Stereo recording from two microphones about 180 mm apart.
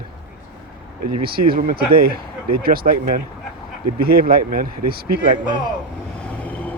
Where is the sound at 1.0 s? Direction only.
55° right (ahead or behind).